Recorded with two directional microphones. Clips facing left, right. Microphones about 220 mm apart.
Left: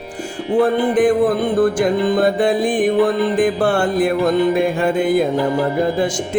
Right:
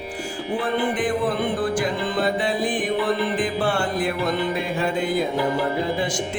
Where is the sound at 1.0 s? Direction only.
45° left (ahead or behind).